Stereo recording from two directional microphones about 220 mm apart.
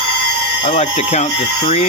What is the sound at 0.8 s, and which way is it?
Speech, 30° left (ahead or behind).